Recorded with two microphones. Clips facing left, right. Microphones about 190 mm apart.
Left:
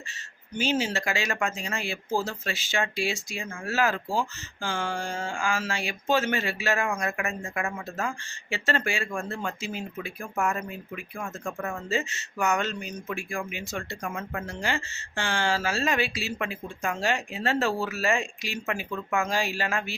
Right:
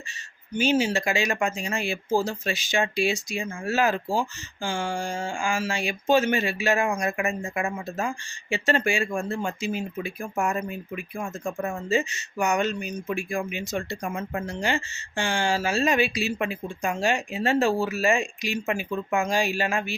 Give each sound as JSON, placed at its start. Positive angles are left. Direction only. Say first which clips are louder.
{"t": 0.5, "sound": "speech", "louder": "right 4 dB", "side_deg": -10}